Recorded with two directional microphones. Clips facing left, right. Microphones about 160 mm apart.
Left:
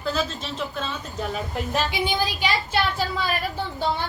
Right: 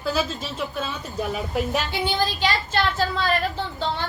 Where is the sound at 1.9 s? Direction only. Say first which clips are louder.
Right 1 dB; 10° left (ahead or behind).